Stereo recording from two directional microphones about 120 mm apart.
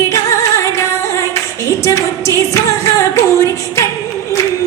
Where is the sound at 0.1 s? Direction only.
25° left (ahead or behind).